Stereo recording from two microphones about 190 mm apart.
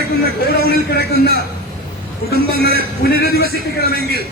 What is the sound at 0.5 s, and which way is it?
Speech, 55° left (ahead or behind).